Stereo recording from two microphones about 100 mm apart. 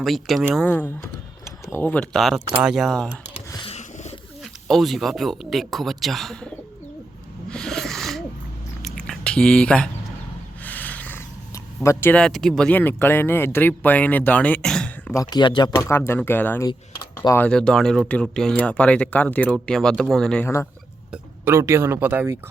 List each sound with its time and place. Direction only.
0.0 s a man's voice: centre (ahead or behind)
0.6 s speech: 20° left (ahead or behind)
2.1 s a man's voice: centre (ahead or behind)
3.6 s a sound: 80° left
4.7 s a man's voice: centre (ahead or behind)
7.5 s dog: 5° left (ahead or behind)
8.8 s a sound: 5° left (ahead or behind)
11.5 s a sound: 30° left (ahead or behind)
12.1 s speech: 5° left (ahead or behind)
15.1 s speech: 40° left (ahead or behind)
15.8 s speech: 25° left (ahead or behind)
17.5 s a man's voice: 10° left (ahead or behind)
20.4 s speech: 30° left (ahead or behind)
21.4 s speech: 25° right (ahead or behind)